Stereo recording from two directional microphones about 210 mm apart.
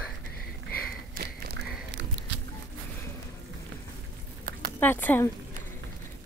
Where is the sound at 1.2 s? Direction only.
50° right (ahead or behind).